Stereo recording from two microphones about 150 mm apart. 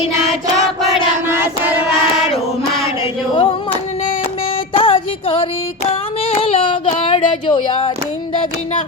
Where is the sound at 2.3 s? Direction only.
40° left (ahead or behind).